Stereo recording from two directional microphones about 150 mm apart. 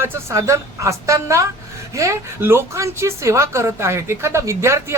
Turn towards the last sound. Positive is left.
turn(degrees=-20)  # may be behind; listen again after turning